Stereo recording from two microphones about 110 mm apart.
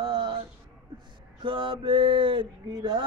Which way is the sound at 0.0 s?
50° right (ahead or behind).